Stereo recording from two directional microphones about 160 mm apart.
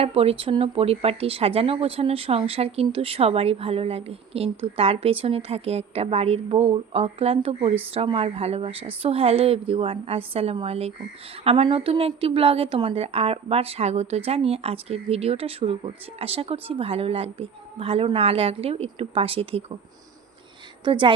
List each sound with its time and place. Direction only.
0.0 s a woman's voice: 40° right (ahead or behind)
20.8 s a woman's voice: 30° right (ahead or behind)